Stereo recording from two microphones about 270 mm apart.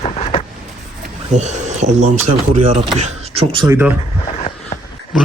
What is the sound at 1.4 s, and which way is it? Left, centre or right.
Speech, right.